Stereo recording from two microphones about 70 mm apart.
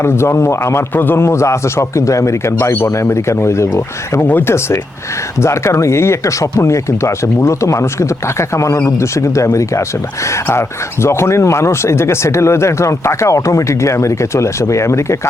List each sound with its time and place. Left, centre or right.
0.0 s a man's voice: left
4.3 s a man's voice: left
11.0 s speech: left